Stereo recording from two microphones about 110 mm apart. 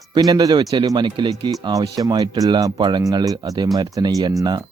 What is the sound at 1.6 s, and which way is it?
Speech, 35° right (ahead or behind).